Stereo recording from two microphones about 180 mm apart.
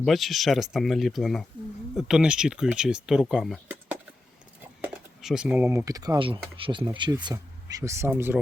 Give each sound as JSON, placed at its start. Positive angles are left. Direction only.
{"t": 0.0, "sound": "speech", "side_deg": 0}